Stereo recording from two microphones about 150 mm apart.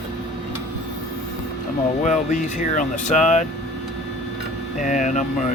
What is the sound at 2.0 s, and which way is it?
Speech, 55° left (ahead or behind).